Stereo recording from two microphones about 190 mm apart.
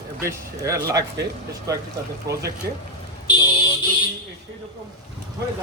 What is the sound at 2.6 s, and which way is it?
Speech, 55° right (ahead or behind).